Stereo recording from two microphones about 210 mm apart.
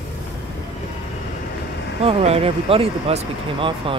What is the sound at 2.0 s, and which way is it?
Speech, 30° right (ahead or behind).